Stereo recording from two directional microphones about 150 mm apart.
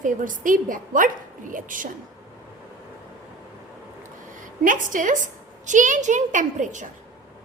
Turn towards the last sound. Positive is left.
turn(degrees=-55)  # may be behind; listen again after turning